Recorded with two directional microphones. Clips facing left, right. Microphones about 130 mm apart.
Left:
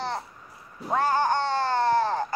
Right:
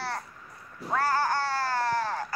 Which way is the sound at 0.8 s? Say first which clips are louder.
Left 3 dB; 20° left (ahead or behind).